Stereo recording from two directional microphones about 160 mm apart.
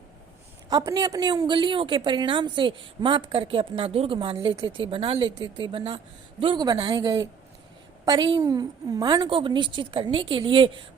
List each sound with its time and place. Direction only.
0.7 s a woman's voice: 25° right (ahead or behind)